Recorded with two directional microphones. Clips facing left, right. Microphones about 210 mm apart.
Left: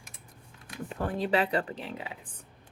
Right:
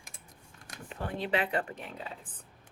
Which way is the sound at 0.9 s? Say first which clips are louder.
Left 4 dB; 40° left (ahead or behind).